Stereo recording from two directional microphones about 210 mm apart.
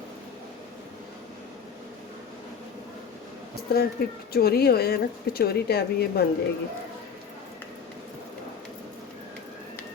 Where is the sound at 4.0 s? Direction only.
45° left (ahead or behind).